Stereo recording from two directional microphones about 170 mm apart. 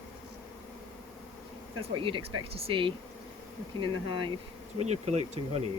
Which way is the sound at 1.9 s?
30° right (ahead or behind).